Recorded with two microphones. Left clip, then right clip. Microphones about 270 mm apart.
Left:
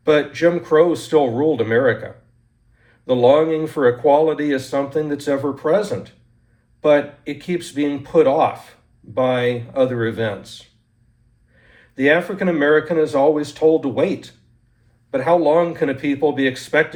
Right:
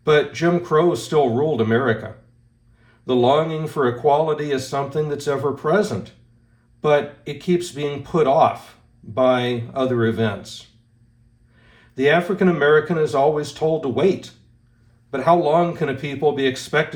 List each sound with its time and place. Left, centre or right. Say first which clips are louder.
0.6 s speech: left 3 dB; right
3.1 s speech: left 4 dB; centre
11.9 s speech: left 1 dB; centre